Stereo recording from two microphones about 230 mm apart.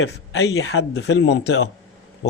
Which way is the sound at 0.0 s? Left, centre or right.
Left.